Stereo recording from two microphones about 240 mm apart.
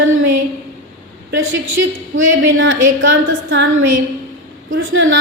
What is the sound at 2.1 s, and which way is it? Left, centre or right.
A woman's voice, right.